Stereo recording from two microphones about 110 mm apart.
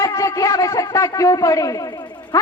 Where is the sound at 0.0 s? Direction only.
30° left (ahead or behind).